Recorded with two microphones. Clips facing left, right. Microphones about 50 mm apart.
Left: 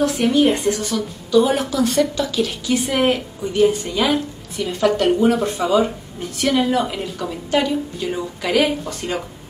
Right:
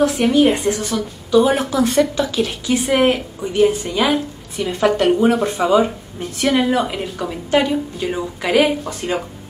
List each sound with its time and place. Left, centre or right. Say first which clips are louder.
0.3 s a woman's voice: right 2 dB; centre